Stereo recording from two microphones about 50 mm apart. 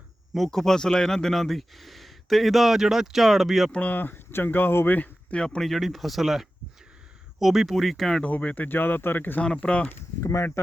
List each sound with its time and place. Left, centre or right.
0.3 s speech: centre
3.7 s speech: left
3.9 s speech: left
5.3 s speech: centre
5.6 s speech: centre
8.2 s speech: left
9.6 s speech: left
10.2 s speech: left